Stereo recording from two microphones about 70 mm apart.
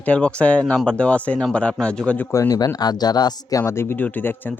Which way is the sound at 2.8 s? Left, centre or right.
Left.